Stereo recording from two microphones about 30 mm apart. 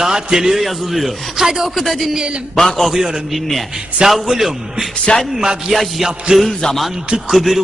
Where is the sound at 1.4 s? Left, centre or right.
Centre.